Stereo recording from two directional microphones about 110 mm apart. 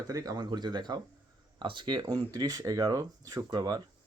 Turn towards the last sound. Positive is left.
turn(degrees=-40)  # may be behind; listen again after turning